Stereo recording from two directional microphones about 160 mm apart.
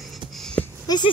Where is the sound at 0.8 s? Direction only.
25° left (ahead or behind).